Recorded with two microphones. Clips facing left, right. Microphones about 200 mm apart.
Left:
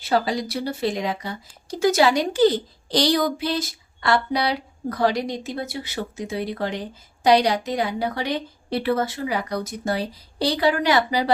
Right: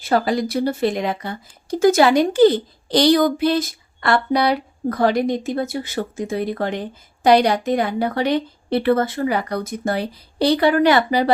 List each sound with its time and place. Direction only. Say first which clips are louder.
0.0 s speech: right 4 dB; 50° right (ahead or behind)